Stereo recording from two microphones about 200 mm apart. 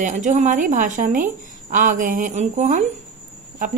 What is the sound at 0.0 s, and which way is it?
A woman's voice, 40° right (ahead or behind).